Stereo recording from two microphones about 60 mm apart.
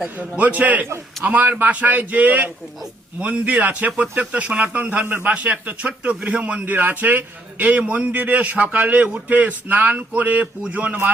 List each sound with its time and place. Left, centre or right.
0.2 s a man's voice: right
6.7 s a man's voice: right